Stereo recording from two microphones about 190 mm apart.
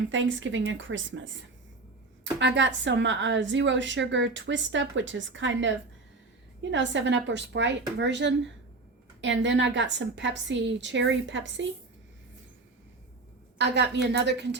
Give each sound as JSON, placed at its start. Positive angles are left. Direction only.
{"t": 0.1, "sound": "speech", "side_deg": -80}
{"t": 2.4, "sound": "a woman's voice", "side_deg": -70}
{"t": 13.6, "sound": "a woman's voice", "side_deg": -65}